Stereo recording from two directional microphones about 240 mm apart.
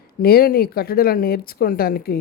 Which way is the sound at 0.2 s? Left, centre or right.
Left.